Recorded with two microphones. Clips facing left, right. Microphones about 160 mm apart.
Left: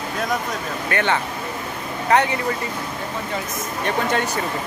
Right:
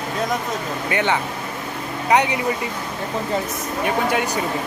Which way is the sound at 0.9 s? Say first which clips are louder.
Even; 15° right (ahead or behind).